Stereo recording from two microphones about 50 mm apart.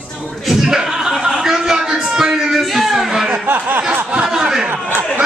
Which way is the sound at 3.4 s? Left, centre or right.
Right.